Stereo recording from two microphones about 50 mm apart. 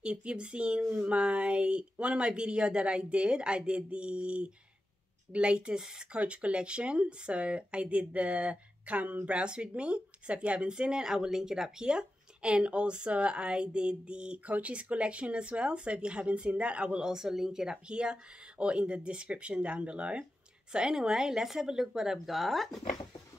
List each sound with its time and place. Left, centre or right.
0.0 s speech: right
5.8 s speech: centre
6.1 s speech: right
9.4 s speech: right; by 22.8 s centre